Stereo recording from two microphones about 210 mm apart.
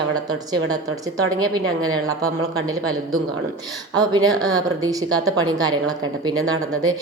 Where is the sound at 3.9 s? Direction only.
20° right (ahead or behind).